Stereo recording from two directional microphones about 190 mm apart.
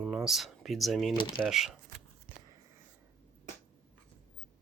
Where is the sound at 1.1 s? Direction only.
25° left (ahead or behind).